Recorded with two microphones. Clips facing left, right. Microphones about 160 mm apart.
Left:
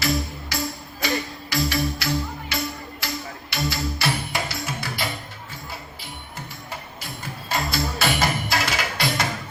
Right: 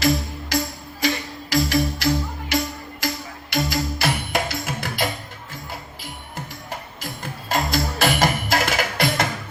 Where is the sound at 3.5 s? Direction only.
45° right (ahead or behind).